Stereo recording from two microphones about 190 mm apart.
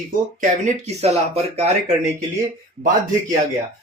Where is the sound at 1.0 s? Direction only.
35° right (ahead or behind).